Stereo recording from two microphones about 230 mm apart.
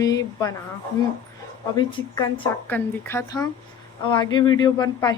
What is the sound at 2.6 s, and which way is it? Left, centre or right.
Speech, centre.